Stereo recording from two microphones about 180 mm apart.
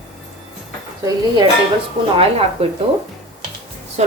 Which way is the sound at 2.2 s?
30° right (ahead or behind).